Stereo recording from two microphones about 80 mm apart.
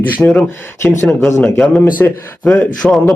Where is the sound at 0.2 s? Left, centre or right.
Centre.